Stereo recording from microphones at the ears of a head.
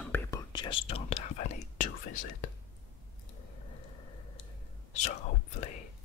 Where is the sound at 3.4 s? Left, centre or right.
Left.